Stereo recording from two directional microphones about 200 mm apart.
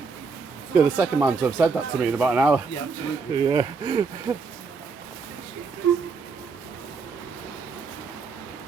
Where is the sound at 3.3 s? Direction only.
20° right (ahead or behind).